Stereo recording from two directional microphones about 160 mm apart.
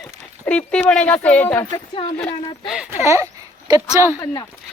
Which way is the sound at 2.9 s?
15° right (ahead or behind).